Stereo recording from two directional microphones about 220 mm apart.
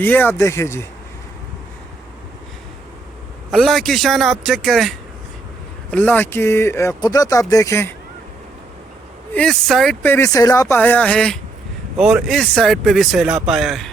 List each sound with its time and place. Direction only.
0.0 s speech: 10° left (ahead or behind)
3.5 s speech: centre (ahead or behind)
9.3 s speech: 5° left (ahead or behind)